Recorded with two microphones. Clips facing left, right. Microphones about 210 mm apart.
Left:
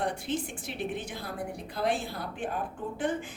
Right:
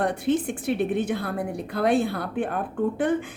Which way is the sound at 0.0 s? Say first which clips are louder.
Right 8 dB; 60° right (ahead or behind).